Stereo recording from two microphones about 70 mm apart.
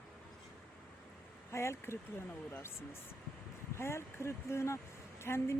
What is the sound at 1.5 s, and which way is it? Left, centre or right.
A woman's voice, left.